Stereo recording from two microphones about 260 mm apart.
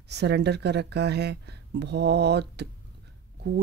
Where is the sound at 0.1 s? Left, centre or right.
Right.